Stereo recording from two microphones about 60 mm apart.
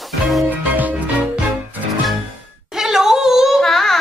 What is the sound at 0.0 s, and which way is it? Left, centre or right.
Music, centre.